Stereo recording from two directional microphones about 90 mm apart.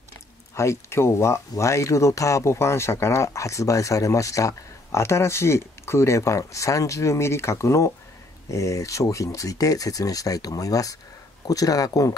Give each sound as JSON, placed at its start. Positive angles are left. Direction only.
{"t": 0.6, "sound": "speech", "side_deg": 30}